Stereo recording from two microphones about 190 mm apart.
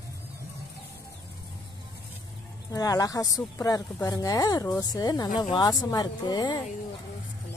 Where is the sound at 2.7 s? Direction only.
20° left (ahead or behind).